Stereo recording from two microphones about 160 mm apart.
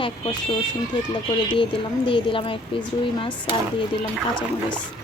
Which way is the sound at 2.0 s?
30° left (ahead or behind).